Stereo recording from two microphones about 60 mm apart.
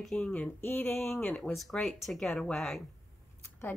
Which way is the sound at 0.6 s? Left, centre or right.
Left.